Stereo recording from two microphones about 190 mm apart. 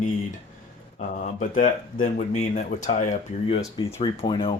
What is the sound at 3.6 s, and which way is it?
Speech, 20° left (ahead or behind).